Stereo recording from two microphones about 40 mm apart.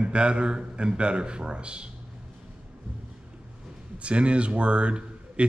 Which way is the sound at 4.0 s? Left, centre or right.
Right.